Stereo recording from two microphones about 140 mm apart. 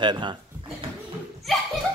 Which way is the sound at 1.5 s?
Centre (ahead or behind).